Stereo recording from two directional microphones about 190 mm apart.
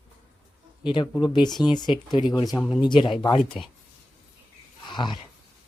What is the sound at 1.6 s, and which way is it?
Speech, 20° left (ahead or behind).